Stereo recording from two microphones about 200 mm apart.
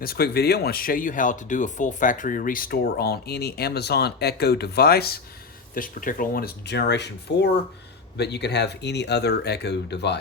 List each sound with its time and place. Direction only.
0.0 s speech: 50° left (ahead or behind)